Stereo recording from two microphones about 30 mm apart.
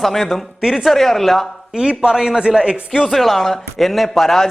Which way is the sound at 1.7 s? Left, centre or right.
Right.